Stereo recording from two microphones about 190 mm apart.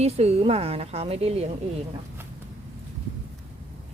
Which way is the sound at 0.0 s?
35° right (ahead or behind).